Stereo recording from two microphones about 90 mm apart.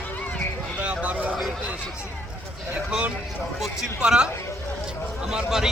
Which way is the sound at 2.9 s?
15° right (ahead or behind).